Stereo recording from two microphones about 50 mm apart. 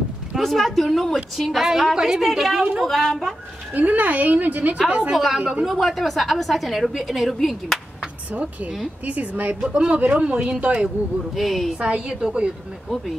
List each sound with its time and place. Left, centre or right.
0.4 s a woman's voice: centre
3.7 s a woman's voice: right
4.8 s speech: right
5.1 s a woman's voice: centre
9.0 s a woman's voice: right
11.3 s a woman's voice: centre
11.8 s speech: right